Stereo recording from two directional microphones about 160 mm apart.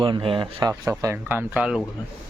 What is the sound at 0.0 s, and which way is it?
Speech, 35° right (ahead or behind).